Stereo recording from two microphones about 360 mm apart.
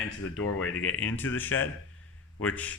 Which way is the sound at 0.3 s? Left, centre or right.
Left.